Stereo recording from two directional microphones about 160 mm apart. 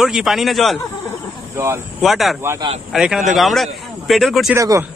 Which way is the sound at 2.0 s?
Centre (ahead or behind).